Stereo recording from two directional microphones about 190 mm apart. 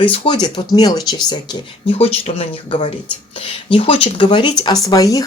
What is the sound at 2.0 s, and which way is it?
Speech, 30° left (ahead or behind).